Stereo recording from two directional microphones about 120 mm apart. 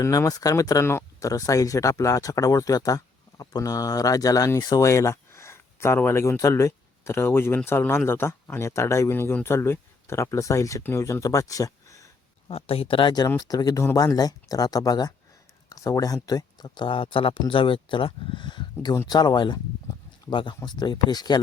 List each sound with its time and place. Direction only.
0.0 s speech: 30° left (ahead or behind)
12.5 s speech: 55° left (ahead or behind); by 21.4 s 35° left (ahead or behind)